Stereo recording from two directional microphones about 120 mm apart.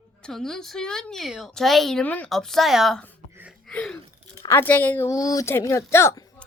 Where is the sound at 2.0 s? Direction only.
10° left (ahead or behind).